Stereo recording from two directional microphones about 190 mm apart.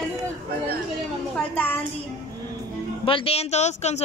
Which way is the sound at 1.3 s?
10° left (ahead or behind).